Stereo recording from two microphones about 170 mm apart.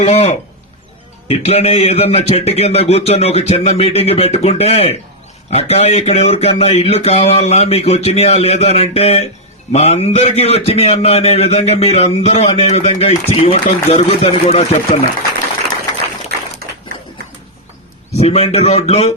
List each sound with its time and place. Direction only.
0.0 s speech: 40° left (ahead or behind)
18.2 s speech: 35° left (ahead or behind)